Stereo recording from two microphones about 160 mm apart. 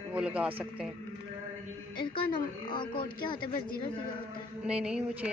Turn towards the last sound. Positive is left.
turn(degrees=-5)  # may be behind; listen again after turning